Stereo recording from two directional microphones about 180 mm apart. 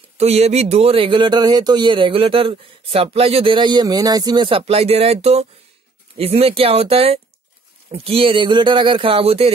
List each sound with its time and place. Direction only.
0.2 s speech: 35° right (ahead or behind)